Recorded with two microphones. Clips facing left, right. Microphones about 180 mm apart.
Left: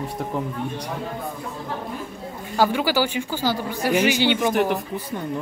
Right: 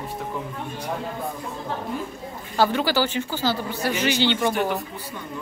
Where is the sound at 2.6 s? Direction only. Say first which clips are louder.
Left 1 dB; 10° left (ahead or behind).